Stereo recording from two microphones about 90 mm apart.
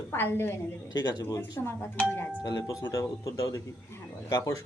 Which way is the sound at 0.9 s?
50° left (ahead or behind).